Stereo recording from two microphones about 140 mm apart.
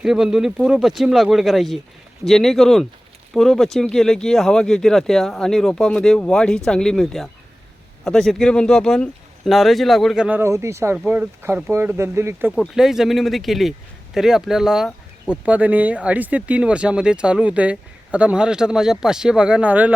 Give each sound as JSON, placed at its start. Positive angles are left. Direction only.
{"t": 0.0, "sound": "a man's voice", "side_deg": -5}
{"t": 10.2, "sound": "speech", "side_deg": -15}
{"t": 12.5, "sound": "a man's voice", "side_deg": -5}